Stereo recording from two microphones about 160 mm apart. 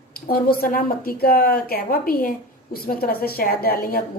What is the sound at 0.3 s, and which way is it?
A woman's voice, 65° left (ahead or behind).